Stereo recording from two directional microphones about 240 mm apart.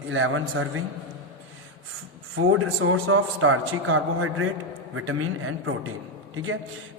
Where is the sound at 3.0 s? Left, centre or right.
Right.